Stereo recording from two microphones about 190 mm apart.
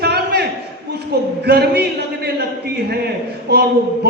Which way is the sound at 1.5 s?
55° right (ahead or behind).